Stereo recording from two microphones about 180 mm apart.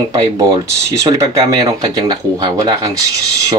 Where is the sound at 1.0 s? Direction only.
25° right (ahead or behind).